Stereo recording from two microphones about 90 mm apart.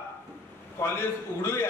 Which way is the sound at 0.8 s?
30° left (ahead or behind).